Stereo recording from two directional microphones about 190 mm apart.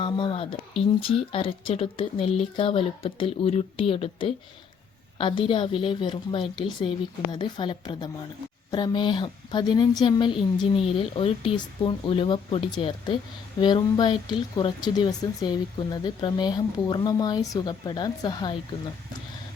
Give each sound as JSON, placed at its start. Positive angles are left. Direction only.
{"t": 0.0, "sound": "speech", "side_deg": 25}